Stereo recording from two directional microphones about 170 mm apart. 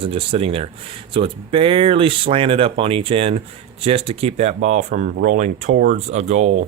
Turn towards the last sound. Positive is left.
turn(degrees=-40)  # may be behind; listen again after turning